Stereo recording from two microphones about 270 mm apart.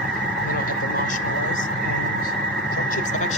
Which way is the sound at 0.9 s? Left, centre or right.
Left.